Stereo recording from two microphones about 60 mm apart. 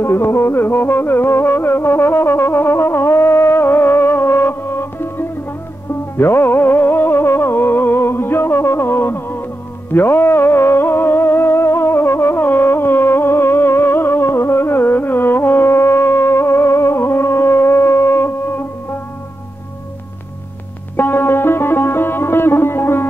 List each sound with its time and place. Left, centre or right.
0.0 s music: left
20.9 s music: left